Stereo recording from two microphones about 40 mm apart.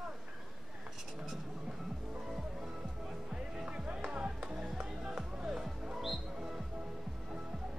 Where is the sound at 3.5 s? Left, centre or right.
Centre.